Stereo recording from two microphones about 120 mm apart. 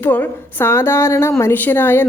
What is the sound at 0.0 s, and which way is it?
A woman's voice, 15° left (ahead or behind).